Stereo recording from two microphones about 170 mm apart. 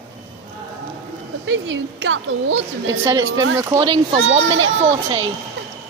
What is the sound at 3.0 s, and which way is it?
A woman's voice, 15° right (ahead or behind).